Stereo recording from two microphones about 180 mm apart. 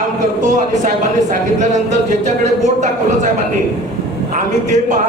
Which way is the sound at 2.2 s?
40° right (ahead or behind).